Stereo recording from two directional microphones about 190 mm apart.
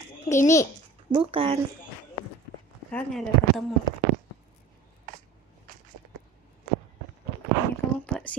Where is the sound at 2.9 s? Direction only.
Centre (ahead or behind).